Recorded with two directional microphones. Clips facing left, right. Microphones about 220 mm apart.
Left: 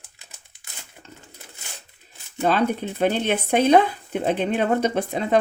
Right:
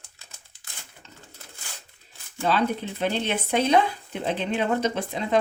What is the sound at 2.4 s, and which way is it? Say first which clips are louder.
Speech: left 3 dB; 50° left (ahead or behind).